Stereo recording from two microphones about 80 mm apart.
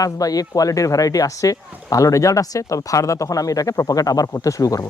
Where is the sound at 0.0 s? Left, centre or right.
Left.